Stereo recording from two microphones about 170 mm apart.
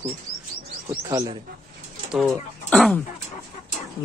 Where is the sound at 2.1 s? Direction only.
Centre (ahead or behind).